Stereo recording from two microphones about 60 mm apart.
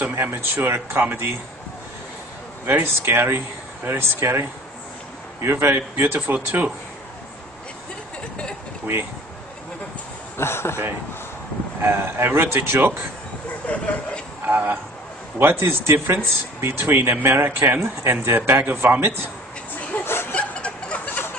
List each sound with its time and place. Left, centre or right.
0.1 s speech: right
2.6 s speech: right
10.3 s speech: left
11.8 s speech: right
13.6 s a sound: left
14.5 s speech: right
15.3 s speech: right
19.7 s a sound: left
20.3 s a sound: centre